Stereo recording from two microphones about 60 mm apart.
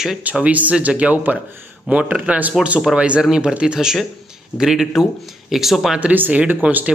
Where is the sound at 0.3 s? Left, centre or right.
Right; by 6.0 s centre.